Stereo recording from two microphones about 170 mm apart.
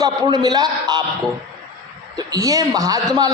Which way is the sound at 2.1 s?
20° right (ahead or behind).